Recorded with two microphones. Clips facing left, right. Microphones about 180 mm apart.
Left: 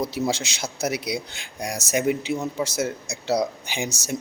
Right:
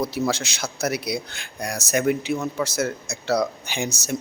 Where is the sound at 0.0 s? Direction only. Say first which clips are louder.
Right 1 dB; 15° left (ahead or behind).